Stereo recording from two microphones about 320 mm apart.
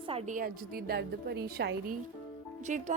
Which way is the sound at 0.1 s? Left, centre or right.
Right.